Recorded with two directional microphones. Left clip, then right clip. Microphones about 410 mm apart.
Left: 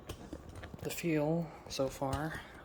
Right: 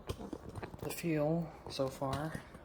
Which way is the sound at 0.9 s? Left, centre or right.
Centre.